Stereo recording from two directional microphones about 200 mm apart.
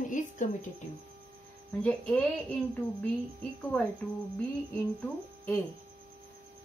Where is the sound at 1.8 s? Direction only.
5° left (ahead or behind).